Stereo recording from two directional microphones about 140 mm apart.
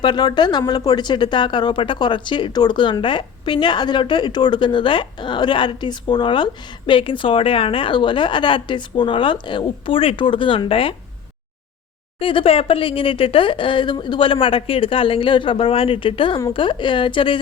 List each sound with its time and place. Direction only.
0.0 s speech: 30° left (ahead or behind)
12.2 s speech: 40° left (ahead or behind)